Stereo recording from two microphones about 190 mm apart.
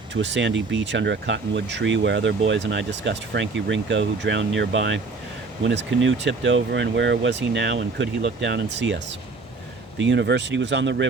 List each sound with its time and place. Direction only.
0.1 s speech: 70° right (ahead or behind)
10.0 s speech: 70° right (ahead or behind)